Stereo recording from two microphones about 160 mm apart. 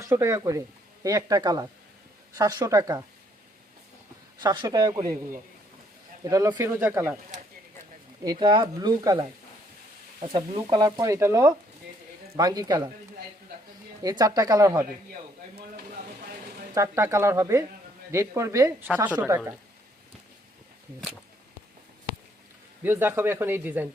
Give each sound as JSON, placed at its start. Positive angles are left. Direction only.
{"t": 0.0, "sound": "speech", "side_deg": -15}
{"t": 4.4, "sound": "speech", "side_deg": -25}
{"t": 6.2, "sound": "speech", "side_deg": -20}
{"t": 8.2, "sound": "speech", "side_deg": -25}
{"t": 14.0, "sound": "speech", "side_deg": -20}
{"t": 16.7, "sound": "speech", "side_deg": -20}
{"t": 22.8, "sound": "speech", "side_deg": -15}